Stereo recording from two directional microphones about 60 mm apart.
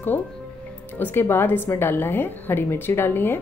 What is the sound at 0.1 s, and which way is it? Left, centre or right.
Speech, left.